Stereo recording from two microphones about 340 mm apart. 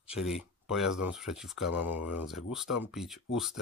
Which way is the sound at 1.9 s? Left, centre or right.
Left.